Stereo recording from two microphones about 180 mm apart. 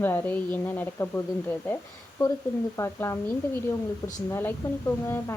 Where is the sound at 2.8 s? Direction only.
15° left (ahead or behind).